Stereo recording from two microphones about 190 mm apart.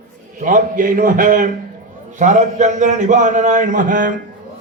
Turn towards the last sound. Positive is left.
turn(degrees=-45)  # may be behind; listen again after turning